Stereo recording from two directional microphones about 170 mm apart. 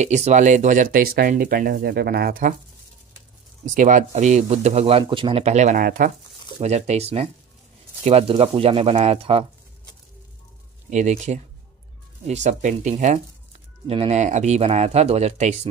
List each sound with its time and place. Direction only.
0.0 s speech: 40° right (ahead or behind); by 2.5 s 60° right (ahead or behind)
3.7 s speech: 50° right (ahead or behind)
6.6 s speech: 40° right (ahead or behind)
10.9 s speech: 45° right (ahead or behind)
12.4 s speech: 45° right (ahead or behind)